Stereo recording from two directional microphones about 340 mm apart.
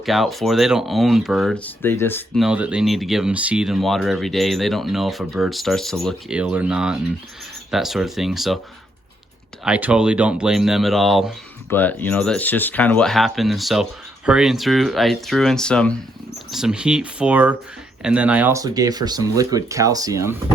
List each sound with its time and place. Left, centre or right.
0.0 s speech: centre
9.6 s speech: centre